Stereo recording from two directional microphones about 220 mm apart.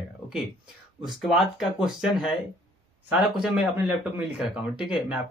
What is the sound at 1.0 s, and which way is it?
Speech, centre (ahead or behind).